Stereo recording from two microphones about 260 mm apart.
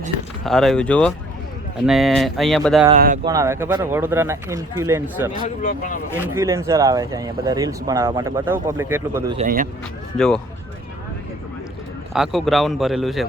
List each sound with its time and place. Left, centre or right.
0.4 s speech: centre
3.2 s speech: centre
5.6 s speech: left
6.2 s speech: centre
9.4 s speech: right
10.2 s speech: centre
12.1 s speech: centre